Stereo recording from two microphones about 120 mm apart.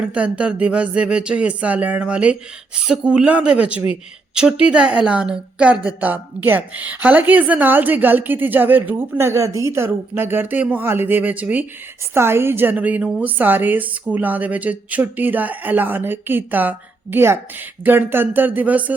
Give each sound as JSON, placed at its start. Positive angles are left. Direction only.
{"t": 0.0, "sound": "speech", "side_deg": -10}